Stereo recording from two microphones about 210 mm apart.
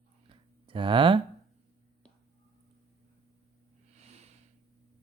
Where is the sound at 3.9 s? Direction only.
30° right (ahead or behind).